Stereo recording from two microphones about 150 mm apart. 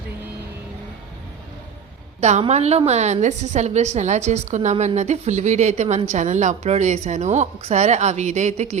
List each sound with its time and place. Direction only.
2.4 s a woman's voice: 45° right (ahead or behind)